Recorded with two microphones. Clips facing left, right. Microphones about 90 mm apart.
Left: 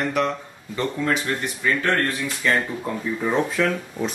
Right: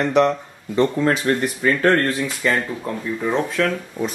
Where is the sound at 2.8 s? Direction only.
5° left (ahead or behind).